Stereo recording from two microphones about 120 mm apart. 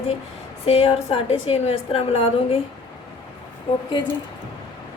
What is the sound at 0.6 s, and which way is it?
A woman's voice, 55° left (ahead or behind).